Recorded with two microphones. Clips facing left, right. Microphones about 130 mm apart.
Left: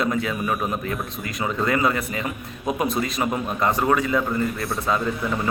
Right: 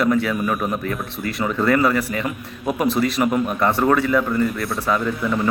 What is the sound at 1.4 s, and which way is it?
A man's voice, 20° left (ahead or behind).